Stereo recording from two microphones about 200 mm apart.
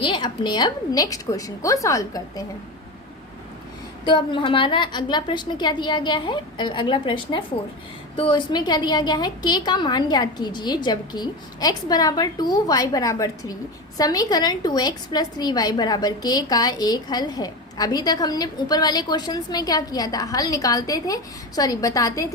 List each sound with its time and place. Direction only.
0.0 s a woman's voice: 25° left (ahead or behind)
4.0 s a woman's voice: 25° left (ahead or behind)